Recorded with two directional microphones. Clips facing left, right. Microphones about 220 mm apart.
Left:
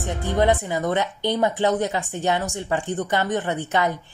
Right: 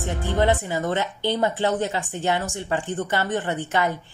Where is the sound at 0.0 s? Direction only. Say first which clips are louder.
Left 1 dB; 15° left (ahead or behind).